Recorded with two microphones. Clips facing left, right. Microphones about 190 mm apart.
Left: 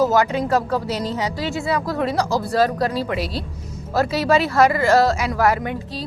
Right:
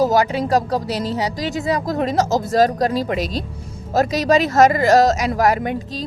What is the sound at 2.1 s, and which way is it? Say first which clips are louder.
Speech: right 4 dB; 45° right (ahead or behind).